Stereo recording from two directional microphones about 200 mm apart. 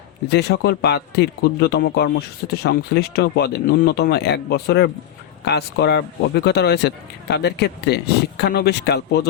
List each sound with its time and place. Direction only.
0.3 s a man's voice: 55° left (ahead or behind)